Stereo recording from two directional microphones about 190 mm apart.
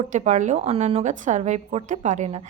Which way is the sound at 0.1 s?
40° right (ahead or behind).